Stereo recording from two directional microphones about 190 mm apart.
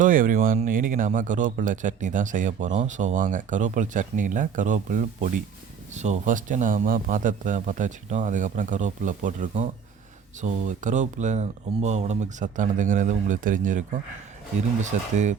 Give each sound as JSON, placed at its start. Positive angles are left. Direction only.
{"t": 0.0, "sound": "speech", "side_deg": -45}